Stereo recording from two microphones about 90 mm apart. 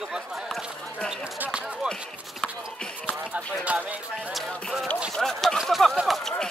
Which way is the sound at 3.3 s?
15° right (ahead or behind).